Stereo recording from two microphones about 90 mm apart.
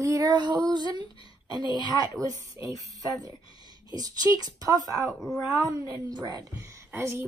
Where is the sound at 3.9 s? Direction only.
45° right (ahead or behind).